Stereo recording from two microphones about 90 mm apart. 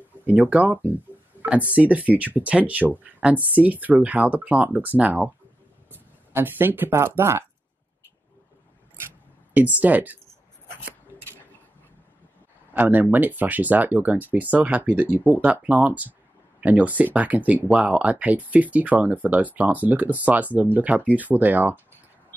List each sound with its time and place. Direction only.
0.1 s a sound: 20° right (ahead or behind)
0.5 s speech: 15° right (ahead or behind)
9.5 s speech: 15° right (ahead or behind)
12.7 s speech: 20° right (ahead or behind)